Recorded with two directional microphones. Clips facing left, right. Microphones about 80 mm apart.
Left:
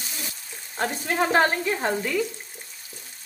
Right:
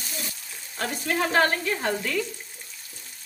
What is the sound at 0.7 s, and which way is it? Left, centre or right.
Frying, left.